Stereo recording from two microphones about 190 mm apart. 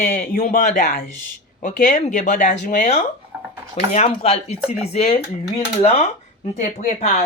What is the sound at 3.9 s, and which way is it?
Speech, 35° left (ahead or behind).